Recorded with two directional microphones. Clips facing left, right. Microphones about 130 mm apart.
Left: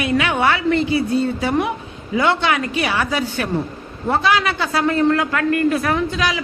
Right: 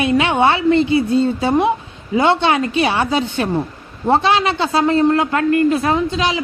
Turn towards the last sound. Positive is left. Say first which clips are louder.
# right 3 dB
turn(degrees=-25)  # may be behind; listen again after turning